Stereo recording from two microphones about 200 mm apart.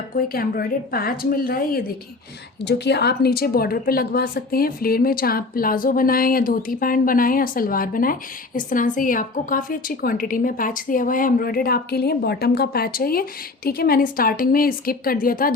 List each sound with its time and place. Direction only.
0.2 s a woman's voice: 45° left (ahead or behind)